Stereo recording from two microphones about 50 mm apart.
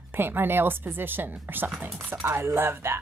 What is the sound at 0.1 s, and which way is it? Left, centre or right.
Speech, right.